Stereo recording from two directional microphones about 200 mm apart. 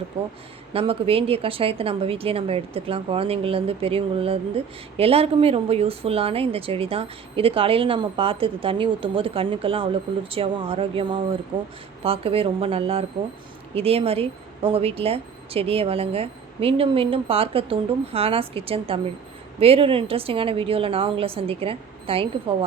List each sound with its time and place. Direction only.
0.7 s speech: 30° right (ahead or behind)